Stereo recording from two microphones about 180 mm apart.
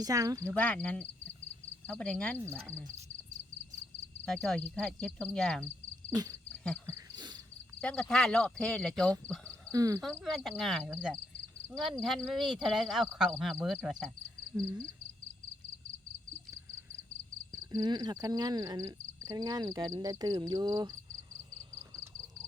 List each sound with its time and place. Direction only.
0.0 s speech: 20° right (ahead or behind)
0.5 s speech: 5° left (ahead or behind)
2.4 s speech: 15° right (ahead or behind)
4.3 s speech: 5° left (ahead or behind)
6.1 s speech: 20° right (ahead or behind)
6.8 s a sound: 15° right (ahead or behind)
7.8 s speech: 5° left (ahead or behind)
9.7 s speech: 20° right (ahead or behind)
10.0 s speech: centre (ahead or behind)
14.5 s speech: 15° right (ahead or behind)
17.5 s speech: 20° right (ahead or behind)